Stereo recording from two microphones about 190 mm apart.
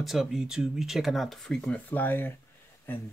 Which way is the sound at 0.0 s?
Centre (ahead or behind).